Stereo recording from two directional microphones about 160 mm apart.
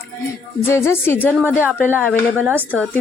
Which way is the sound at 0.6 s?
15° left (ahead or behind).